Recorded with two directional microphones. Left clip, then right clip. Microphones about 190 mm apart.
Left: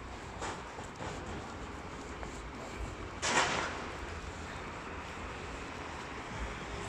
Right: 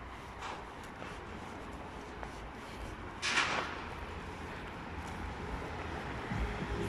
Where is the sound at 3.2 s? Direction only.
35° left (ahead or behind).